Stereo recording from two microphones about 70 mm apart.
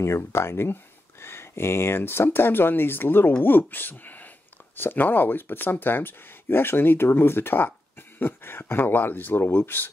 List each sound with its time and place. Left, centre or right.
0.0 s speech: left